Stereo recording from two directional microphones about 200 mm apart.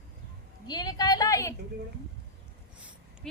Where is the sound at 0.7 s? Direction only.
20° left (ahead or behind).